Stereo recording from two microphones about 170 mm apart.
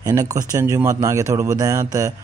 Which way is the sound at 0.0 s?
20° right (ahead or behind).